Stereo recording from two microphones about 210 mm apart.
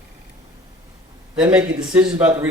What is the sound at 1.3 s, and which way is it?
Speech, 5° right (ahead or behind).